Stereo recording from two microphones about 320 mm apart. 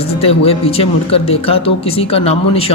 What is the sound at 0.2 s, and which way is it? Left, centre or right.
Speech, centre.